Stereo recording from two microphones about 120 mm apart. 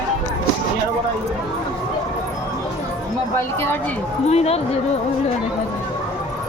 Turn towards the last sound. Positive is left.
turn(degrees=60)  # may be behind; listen again after turning